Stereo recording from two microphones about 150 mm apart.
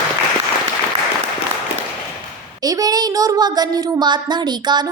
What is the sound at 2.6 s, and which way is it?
A woman's voice, 25° right (ahead or behind).